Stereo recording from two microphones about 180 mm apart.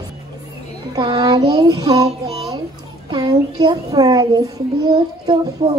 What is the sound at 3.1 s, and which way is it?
Child singing, 20° right (ahead or behind).